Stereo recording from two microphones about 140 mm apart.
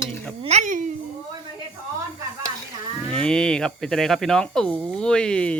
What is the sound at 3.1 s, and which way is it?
Speech, 5° left (ahead or behind).